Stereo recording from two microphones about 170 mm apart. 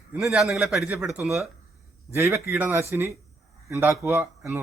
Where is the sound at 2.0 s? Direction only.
15° right (ahead or behind).